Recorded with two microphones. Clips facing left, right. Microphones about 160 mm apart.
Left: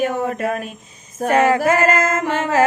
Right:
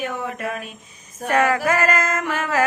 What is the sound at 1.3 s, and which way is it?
Mantra, 25° left (ahead or behind).